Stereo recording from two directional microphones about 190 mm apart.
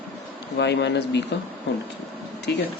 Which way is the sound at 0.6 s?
65° left (ahead or behind).